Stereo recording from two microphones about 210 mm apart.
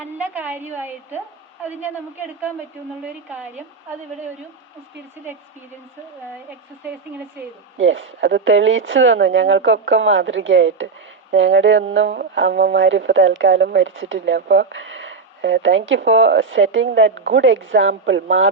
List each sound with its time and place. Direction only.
0.2 s a woman's voice: 10° right (ahead or behind)
7.8 s speech: 65° right (ahead or behind)